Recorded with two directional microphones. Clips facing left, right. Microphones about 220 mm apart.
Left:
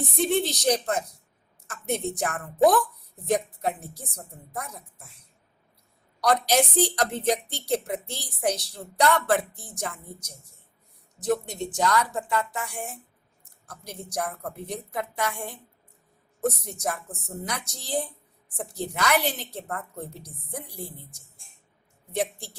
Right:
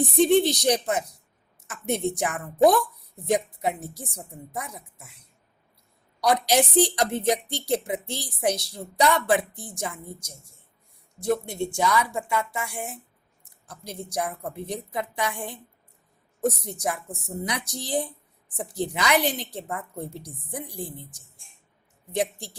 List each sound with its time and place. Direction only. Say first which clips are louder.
0.2 s a woman's voice: right 6 dB; 15° right (ahead or behind)
6.1 s a woman's voice: right 1 dB; 10° right (ahead or behind)
16.8 s a woman's voice: right 1 dB; 15° right (ahead or behind)
20.1 s a woman's voice: right 4 dB; 30° right (ahead or behind)
20.5 s a woman's voice: right 3 dB; 15° right (ahead or behind)
22.1 s a woman's voice: right 2 dB; 15° right (ahead or behind)